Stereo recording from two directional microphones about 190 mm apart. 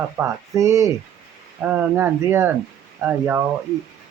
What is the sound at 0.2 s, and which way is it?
Speech, 15° right (ahead or behind).